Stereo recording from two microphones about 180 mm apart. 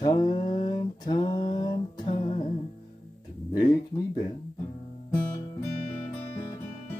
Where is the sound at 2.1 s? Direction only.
35° left (ahead or behind).